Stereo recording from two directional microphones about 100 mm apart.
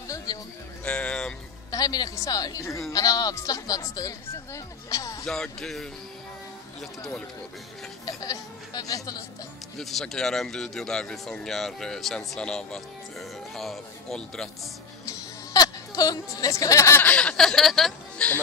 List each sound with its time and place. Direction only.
0.3 s music: 35° left (ahead or behind)
0.8 s a sound: 10° left (ahead or behind)
1.7 s speech: 40° left (ahead or behind)
5.2 s speech: 5° left (ahead or behind)
8.0 s speech: 40° left (ahead or behind)
9.8 s speech: centre (ahead or behind)
15.0 s a sound: 35° left (ahead or behind)
17.0 s speech: 15° left (ahead or behind)